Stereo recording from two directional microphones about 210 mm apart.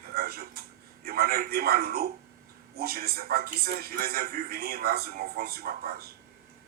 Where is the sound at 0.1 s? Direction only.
45° right (ahead or behind).